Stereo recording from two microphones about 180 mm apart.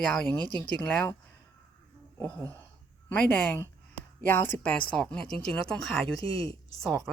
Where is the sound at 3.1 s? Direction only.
10° left (ahead or behind).